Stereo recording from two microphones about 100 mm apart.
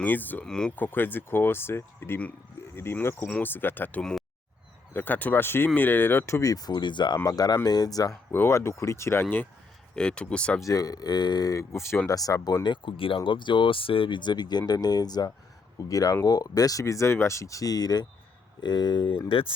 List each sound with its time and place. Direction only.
0.0 s speech: 20° left (ahead or behind)
0.4 s speech: 5° left (ahead or behind)
0.8 s speech: 20° left (ahead or behind); by 7.2 s 50° left (ahead or behind)
7.3 s speech: 40° left (ahead or behind)
8.3 s speech: 25° left (ahead or behind)
9.9 s speech: 10° left (ahead or behind)
10.6 s speech: 35° left (ahead or behind)
12.0 s speech: 35° left (ahead or behind)
19.3 s speech: 60° left (ahead or behind)